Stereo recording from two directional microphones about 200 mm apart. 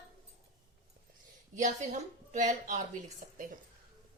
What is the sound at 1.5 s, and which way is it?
A woman's voice, 35° right (ahead or behind).